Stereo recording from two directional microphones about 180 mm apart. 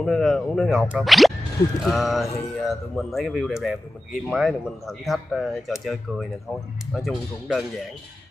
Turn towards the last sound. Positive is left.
turn(degrees=0)  # may be behind; listen again after turning